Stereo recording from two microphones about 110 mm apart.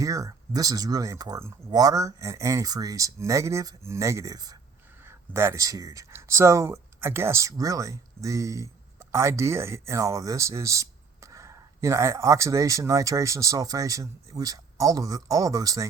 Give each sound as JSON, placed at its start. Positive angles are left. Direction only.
{"t": 0.0, "sound": "speech", "side_deg": -30}
{"t": 5.0, "sound": "speech", "side_deg": -20}